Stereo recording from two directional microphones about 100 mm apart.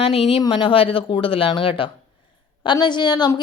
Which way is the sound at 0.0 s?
75° left (ahead or behind).